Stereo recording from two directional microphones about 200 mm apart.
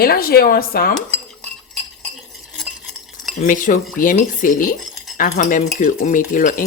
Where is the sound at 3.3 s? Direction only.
40° left (ahead or behind).